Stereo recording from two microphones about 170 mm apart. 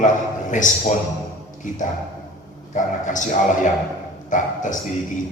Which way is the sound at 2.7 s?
50° left (ahead or behind).